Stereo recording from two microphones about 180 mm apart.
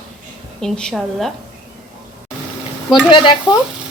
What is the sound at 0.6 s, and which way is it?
Speech, 5° left (ahead or behind).